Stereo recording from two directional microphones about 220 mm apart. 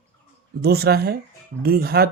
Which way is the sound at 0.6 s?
45° right (ahead or behind).